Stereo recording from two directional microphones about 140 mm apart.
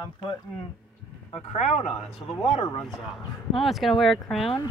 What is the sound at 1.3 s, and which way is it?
Speech, 50° left (ahead or behind).